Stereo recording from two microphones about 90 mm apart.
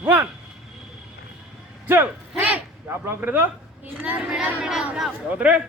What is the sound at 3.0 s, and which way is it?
A man's voice, 20° right (ahead or behind).